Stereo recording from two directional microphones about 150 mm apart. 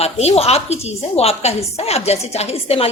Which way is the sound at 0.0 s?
45° left (ahead or behind).